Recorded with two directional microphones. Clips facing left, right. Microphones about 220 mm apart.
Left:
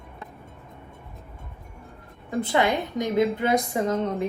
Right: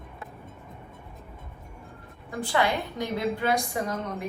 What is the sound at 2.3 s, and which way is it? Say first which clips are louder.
A woman's voice: left 3 dB; 20° left (ahead or behind).